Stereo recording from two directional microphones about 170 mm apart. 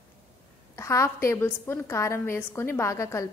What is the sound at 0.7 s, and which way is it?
A woman's voice, 15° left (ahead or behind).